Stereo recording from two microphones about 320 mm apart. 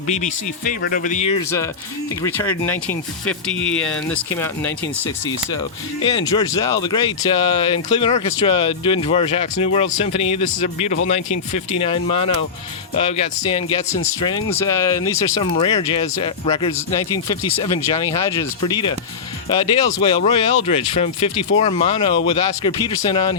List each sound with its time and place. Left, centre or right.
0.1 s speech: left
2.2 s speech: centre
6.0 s speech: centre